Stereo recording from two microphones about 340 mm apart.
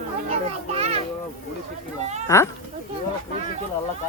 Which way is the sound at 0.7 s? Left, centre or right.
Centre.